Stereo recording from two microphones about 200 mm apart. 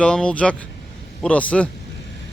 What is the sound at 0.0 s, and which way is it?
Speech, 5° left (ahead or behind).